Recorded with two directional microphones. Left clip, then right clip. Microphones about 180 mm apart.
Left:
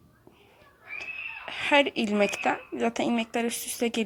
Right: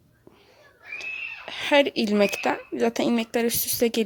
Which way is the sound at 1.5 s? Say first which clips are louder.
Right 2 dB; 35° right (ahead or behind).